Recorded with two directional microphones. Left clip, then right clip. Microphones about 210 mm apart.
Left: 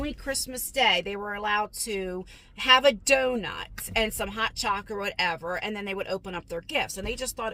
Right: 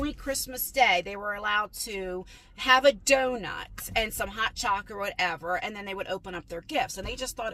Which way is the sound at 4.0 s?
25° right (ahead or behind).